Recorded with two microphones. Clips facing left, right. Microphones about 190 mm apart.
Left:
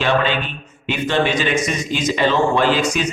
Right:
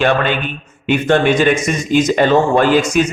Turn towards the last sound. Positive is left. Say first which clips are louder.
# right 5 dB
turn(degrees=-50)  # may be behind; listen again after turning